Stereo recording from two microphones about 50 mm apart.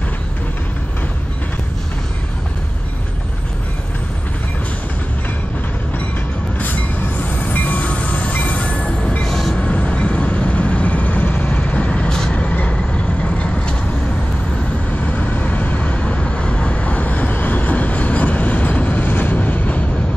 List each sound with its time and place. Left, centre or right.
6.6 s train: left
9.2 s train: centre
9.6 s vehicle: left
14.9 s vehicle: left